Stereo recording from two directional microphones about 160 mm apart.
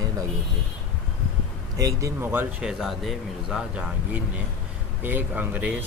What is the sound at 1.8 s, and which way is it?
Speech, 15° right (ahead or behind).